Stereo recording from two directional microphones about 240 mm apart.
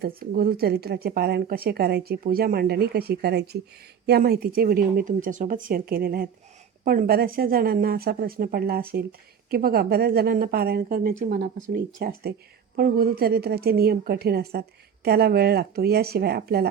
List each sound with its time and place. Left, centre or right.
0.0 s speech: right